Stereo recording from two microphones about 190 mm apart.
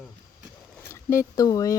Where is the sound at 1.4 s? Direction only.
20° left (ahead or behind).